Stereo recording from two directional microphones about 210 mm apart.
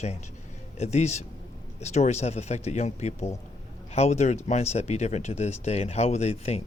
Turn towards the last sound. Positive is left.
turn(degrees=30)  # may be behind; listen again after turning